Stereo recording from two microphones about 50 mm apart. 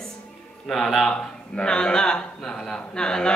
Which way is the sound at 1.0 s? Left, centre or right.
Centre.